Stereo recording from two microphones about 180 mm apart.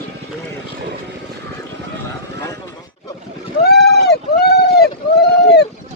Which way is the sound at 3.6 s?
65° left (ahead or behind).